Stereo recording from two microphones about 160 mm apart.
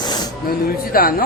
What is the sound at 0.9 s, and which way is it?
Speech, 65° left (ahead or behind).